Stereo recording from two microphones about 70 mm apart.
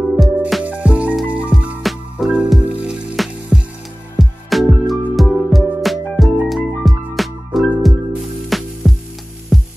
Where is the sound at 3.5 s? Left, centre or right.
Centre.